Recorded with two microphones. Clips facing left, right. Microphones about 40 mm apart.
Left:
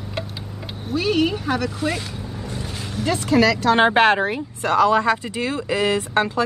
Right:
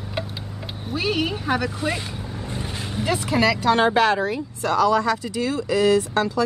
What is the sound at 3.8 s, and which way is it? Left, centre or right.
Speech, left.